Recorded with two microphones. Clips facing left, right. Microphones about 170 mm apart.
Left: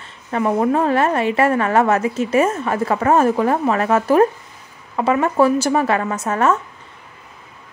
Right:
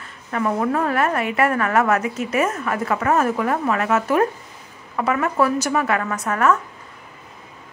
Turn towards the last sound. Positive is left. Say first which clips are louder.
# left 1 dB
turn(degrees=25)  # may be behind; listen again after turning